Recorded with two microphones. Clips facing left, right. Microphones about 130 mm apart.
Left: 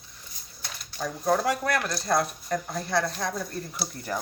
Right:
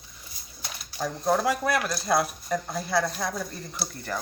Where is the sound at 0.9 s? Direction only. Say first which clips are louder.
Even; 5° right (ahead or behind).